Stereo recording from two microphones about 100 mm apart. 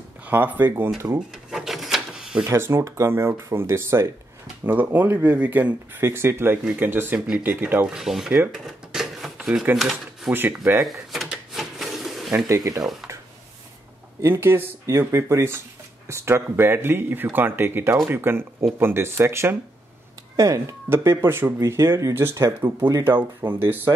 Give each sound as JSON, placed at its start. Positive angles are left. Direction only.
{"t": 0.2, "sound": "speech", "side_deg": -20}
{"t": 1.3, "sound": "a sound", "side_deg": -5}
{"t": 2.4, "sound": "speech", "side_deg": -25}
{"t": 8.6, "sound": "a sound", "side_deg": 0}
{"t": 9.8, "sound": "cash register", "side_deg": 0}
{"t": 10.3, "sound": "speech", "side_deg": -20}
{"t": 10.8, "sound": "a sound", "side_deg": 0}
{"t": 12.4, "sound": "speech", "side_deg": -35}
{"t": 14.2, "sound": "speech", "side_deg": -25}